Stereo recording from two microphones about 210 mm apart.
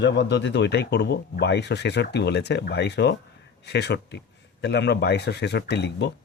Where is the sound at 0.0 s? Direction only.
55° left (ahead or behind).